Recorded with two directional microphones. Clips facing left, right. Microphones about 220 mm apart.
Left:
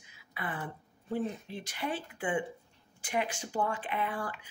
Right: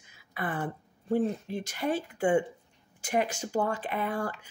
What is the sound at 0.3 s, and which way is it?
Speech, 45° right (ahead or behind).